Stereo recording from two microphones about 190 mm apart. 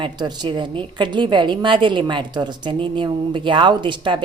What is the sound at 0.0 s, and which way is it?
A woman's voice, 20° right (ahead or behind).